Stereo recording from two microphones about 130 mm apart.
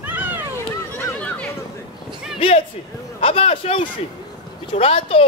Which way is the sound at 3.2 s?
50° left (ahead or behind).